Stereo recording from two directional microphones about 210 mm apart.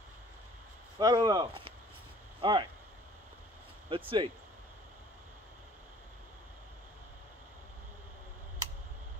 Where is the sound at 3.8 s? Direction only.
25° right (ahead or behind).